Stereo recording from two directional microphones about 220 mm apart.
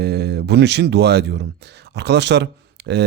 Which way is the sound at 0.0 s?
50° right (ahead or behind).